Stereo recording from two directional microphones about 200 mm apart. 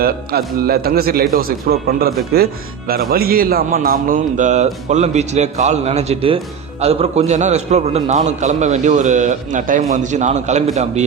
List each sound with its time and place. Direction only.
0.0 s a man's voice: 50° right (ahead or behind); by 10.6 s 35° right (ahead or behind)